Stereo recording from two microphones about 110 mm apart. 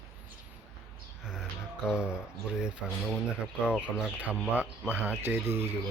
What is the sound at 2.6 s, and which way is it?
Speech, 5° right (ahead or behind).